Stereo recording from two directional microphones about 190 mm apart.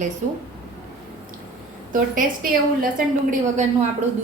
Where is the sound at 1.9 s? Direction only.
45° right (ahead or behind).